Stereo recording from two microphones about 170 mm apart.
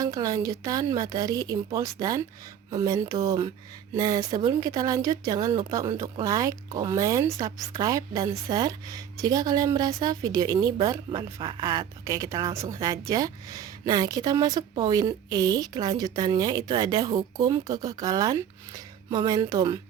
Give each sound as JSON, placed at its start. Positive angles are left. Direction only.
{"t": 0.0, "sound": "a woman's voice", "side_deg": -20}